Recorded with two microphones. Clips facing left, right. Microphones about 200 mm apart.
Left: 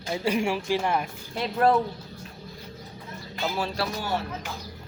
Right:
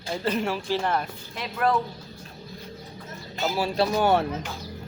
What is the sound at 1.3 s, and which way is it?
Speech, 30° left (ahead or behind).